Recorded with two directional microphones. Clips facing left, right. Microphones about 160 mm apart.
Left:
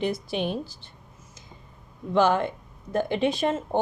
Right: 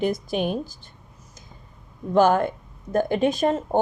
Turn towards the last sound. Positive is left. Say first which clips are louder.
# right 3 dB
turn(degrees=-45)  # may be behind; listen again after turning